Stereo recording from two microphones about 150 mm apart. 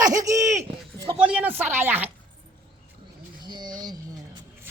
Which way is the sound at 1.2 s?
10° right (ahead or behind).